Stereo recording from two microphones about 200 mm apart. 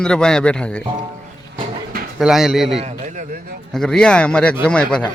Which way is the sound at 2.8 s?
35° right (ahead or behind).